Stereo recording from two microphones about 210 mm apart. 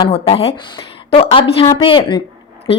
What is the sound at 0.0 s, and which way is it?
Speech, 25° left (ahead or behind).